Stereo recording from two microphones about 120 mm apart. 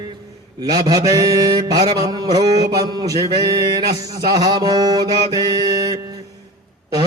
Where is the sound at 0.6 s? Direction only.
30° right (ahead or behind).